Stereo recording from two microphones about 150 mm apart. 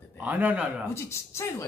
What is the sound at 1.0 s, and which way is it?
Speech, 20° left (ahead or behind).